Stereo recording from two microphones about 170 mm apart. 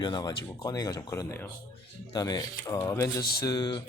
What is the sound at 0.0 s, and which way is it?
Speech, 25° left (ahead or behind).